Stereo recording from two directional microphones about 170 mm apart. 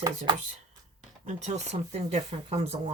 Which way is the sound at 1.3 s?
40° right (ahead or behind).